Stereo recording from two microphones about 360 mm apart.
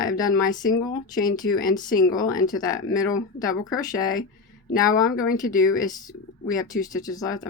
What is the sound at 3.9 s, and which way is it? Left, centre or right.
Speech, left.